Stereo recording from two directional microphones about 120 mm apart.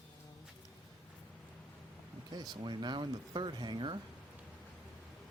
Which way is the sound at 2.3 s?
35° right (ahead or behind).